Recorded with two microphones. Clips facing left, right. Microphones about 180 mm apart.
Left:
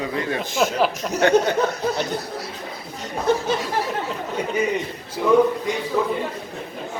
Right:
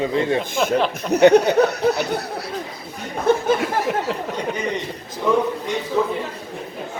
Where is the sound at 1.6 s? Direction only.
70° right (ahead or behind).